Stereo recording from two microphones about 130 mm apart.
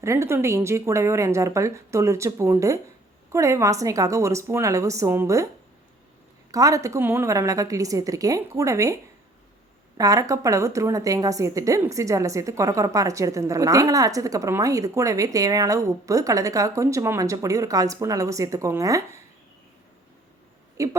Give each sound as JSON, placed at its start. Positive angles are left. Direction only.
{"t": 0.0, "sound": "a woman's voice", "side_deg": -20}
{"t": 6.5, "sound": "a woman's voice", "side_deg": -25}
{"t": 10.0, "sound": "a woman's voice", "side_deg": -25}
{"t": 20.8, "sound": "a woman's voice", "side_deg": -25}